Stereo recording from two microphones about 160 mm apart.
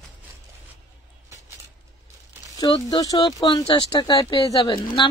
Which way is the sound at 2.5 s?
25° left (ahead or behind).